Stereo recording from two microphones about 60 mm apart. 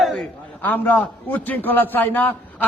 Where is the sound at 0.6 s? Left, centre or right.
Left.